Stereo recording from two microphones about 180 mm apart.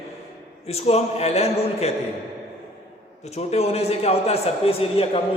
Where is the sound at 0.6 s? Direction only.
35° left (ahead or behind).